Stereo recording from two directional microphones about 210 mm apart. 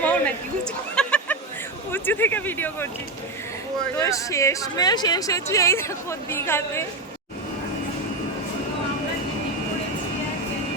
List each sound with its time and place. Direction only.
0.0 s a sound: 5° left (ahead or behind)
1.9 s speech: 10° left (ahead or behind)
3.9 s speech: 15° left (ahead or behind)